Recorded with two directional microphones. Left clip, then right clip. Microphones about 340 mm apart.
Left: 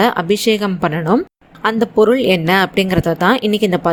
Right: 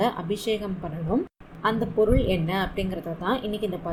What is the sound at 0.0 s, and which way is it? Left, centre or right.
Speech, left.